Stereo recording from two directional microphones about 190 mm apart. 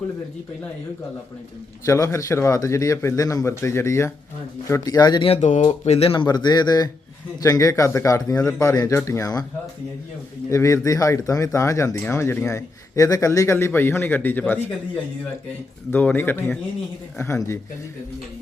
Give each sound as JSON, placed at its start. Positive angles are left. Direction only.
{"t": 1.8, "sound": "speech", "side_deg": 15}
{"t": 10.5, "sound": "speech", "side_deg": 15}
{"t": 15.9, "sound": "speech", "side_deg": 10}